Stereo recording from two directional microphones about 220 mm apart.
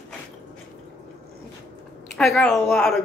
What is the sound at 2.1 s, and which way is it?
Speech, centre (ahead or behind).